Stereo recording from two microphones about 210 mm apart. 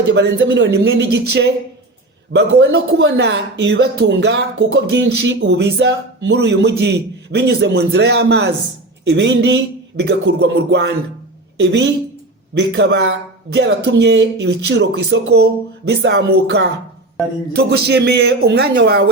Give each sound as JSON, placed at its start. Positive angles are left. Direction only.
{"t": 0.1, "sound": "speech", "side_deg": -55}
{"t": 12.5, "sound": "speech", "side_deg": -55}